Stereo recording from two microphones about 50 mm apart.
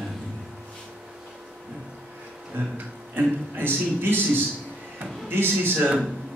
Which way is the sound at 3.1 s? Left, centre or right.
Right.